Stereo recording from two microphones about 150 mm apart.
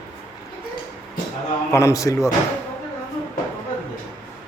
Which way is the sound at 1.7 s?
20° left (ahead or behind).